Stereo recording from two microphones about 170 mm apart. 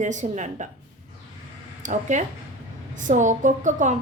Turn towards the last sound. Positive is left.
turn(degrees=-50)  # may be behind; listen again after turning